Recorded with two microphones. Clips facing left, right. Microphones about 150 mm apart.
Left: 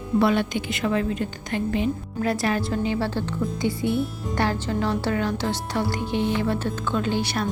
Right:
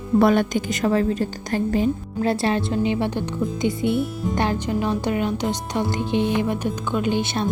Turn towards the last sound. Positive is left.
turn(degrees=-20)  # may be behind; listen again after turning